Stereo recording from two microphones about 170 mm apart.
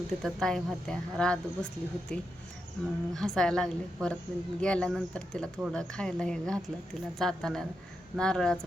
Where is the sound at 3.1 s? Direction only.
5° left (ahead or behind).